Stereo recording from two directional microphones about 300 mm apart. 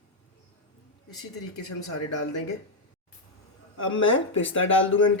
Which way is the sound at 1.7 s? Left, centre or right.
Left.